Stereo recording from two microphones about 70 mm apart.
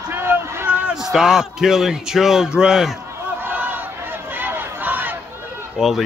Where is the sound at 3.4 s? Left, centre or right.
Right.